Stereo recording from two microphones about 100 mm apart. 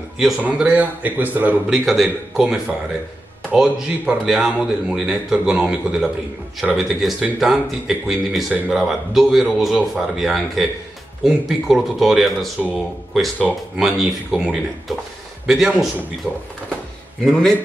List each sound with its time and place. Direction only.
0.4 s a man's voice: 15° right (ahead or behind)
1.7 s a man's voice: centre (ahead or behind)
17.2 s speech: 5° left (ahead or behind)